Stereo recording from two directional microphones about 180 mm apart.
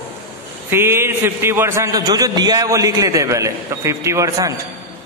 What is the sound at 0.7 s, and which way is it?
A man's voice, 15° right (ahead or behind).